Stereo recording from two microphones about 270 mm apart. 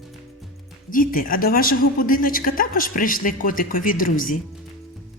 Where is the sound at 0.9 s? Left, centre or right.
Left.